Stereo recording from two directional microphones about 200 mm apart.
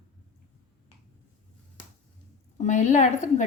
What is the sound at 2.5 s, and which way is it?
Speech, 35° left (ahead or behind).